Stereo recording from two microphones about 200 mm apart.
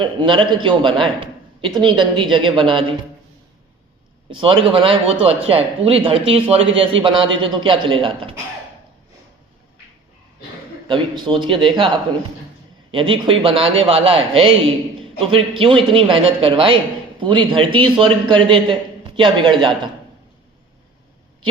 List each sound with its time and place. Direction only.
0.0 s speech: 25° right (ahead or behind)
4.3 s speech: 25° right (ahead or behind)
10.8 s speech: 25° right (ahead or behind)